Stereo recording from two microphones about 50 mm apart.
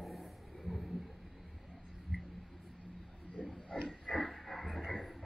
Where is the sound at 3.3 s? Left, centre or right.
Centre.